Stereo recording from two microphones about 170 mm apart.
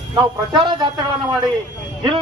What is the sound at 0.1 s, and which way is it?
A man's voice, 25° right (ahead or behind).